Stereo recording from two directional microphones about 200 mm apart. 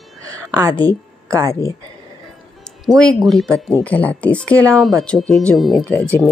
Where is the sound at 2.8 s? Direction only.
5° left (ahead or behind).